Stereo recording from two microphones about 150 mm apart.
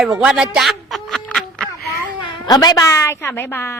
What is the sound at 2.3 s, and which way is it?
Speech, 25° left (ahead or behind).